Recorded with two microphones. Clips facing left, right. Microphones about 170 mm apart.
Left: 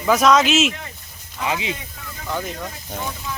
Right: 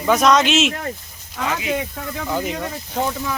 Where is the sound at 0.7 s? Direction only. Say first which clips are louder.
Right 5 dB; 50° right (ahead or behind).